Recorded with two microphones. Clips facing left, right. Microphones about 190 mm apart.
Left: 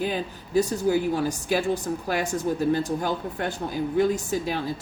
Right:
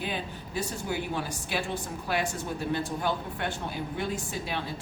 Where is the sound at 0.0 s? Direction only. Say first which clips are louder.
Left 6 dB; 40° left (ahead or behind).